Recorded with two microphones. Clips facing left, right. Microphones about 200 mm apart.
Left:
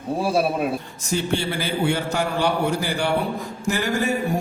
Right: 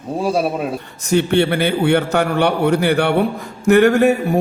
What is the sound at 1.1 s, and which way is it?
A man's voice, 65° right (ahead or behind).